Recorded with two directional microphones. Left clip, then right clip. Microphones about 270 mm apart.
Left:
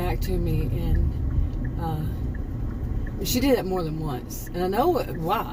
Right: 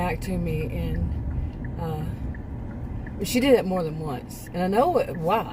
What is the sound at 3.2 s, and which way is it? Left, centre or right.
Speech, centre.